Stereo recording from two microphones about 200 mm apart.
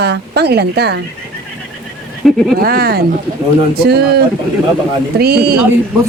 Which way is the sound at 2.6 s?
50° right (ahead or behind).